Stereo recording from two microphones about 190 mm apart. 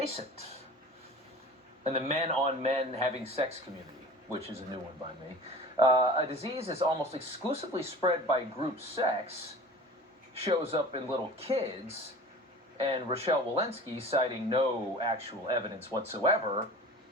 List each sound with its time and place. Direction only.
1.8 s speech: 35° right (ahead or behind)
5.8 s speech: 25° right (ahead or behind)
10.3 s speech: 30° right (ahead or behind)